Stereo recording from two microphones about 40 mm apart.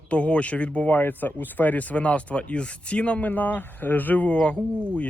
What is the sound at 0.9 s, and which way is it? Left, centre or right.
Speech, left.